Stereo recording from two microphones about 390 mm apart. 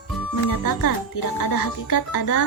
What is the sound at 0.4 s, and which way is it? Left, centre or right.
A woman's voice, left.